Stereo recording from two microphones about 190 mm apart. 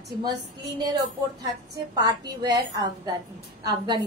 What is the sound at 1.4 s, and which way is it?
A woman's voice, 20° right (ahead or behind).